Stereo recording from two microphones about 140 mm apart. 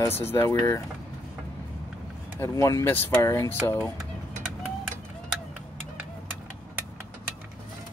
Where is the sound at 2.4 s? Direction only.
20° left (ahead or behind).